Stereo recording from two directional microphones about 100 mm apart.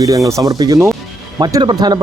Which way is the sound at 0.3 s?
35° right (ahead or behind).